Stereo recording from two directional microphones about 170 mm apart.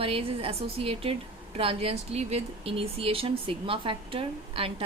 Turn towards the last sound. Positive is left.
turn(degrees=-35)  # may be behind; listen again after turning